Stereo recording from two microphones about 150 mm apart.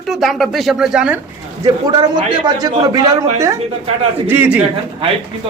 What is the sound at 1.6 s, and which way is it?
A man's voice, 25° right (ahead or behind).